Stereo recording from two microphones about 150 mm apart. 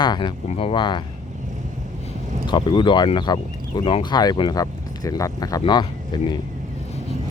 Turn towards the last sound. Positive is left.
turn(degrees=30)  # may be behind; listen again after turning